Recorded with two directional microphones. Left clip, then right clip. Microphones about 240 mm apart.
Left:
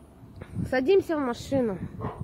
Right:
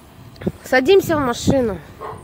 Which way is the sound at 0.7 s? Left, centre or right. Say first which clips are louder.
Right 9 dB; centre.